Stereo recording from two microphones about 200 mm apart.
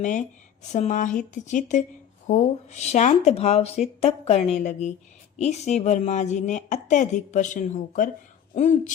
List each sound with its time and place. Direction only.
0.0 s speech: 40° left (ahead or behind)